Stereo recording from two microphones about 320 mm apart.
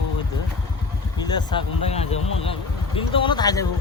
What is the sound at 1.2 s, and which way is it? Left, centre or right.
Speech, centre.